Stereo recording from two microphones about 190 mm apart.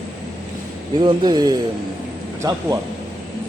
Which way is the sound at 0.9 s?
25° right (ahead or behind).